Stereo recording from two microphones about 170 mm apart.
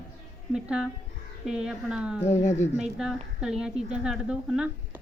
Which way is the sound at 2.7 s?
Centre (ahead or behind).